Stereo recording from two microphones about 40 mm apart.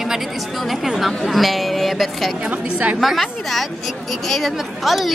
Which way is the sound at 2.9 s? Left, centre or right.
Centre.